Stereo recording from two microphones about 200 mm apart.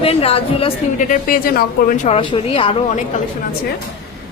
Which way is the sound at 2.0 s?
30° left (ahead or behind).